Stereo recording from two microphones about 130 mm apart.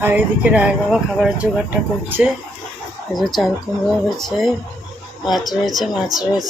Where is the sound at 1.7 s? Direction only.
15° right (ahead or behind).